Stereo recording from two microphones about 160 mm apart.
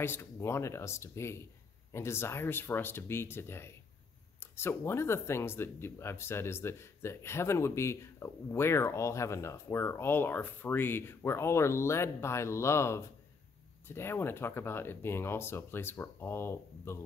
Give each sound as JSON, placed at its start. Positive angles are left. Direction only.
{"t": 0.0, "sound": "speech", "side_deg": 15}